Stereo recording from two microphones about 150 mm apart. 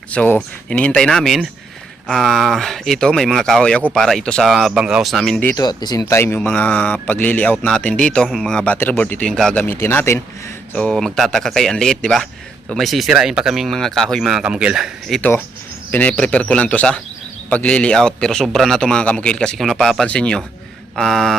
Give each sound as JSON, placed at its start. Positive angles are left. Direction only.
{"t": 0.1, "sound": "a man's voice", "side_deg": 10}
{"t": 5.5, "sound": "speech", "side_deg": 25}
{"t": 9.6, "sound": "speech", "side_deg": 15}
{"t": 10.8, "sound": "a man's voice", "side_deg": 5}
{"t": 15.9, "sound": "a man's voice", "side_deg": 10}